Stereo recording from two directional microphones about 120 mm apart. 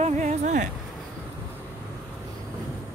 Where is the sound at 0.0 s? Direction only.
80° right.